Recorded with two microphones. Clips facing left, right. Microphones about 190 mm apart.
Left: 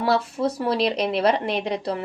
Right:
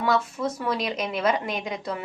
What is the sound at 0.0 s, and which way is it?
A woman's voice, 35° left (ahead or behind).